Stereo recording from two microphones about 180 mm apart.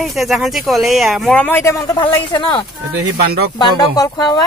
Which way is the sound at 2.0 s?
25° left (ahead or behind).